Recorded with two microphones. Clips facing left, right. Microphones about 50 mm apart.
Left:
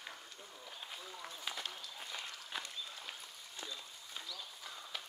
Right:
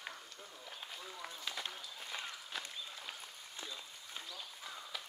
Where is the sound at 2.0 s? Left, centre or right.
Right.